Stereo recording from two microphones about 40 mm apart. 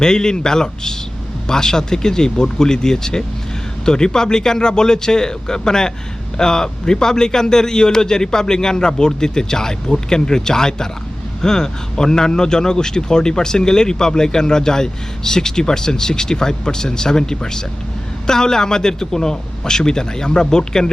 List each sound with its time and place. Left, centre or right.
0.0 s a man's voice: centre